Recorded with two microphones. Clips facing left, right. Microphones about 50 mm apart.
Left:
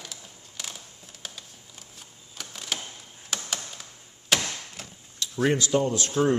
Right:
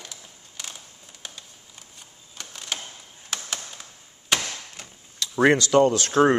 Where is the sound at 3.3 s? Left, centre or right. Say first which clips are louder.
Even; centre.